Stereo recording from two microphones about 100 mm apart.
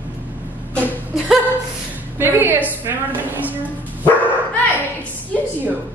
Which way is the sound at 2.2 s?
20° right (ahead or behind).